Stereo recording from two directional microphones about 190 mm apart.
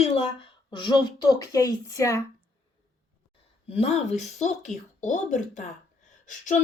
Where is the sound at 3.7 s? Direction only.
35° left (ahead or behind).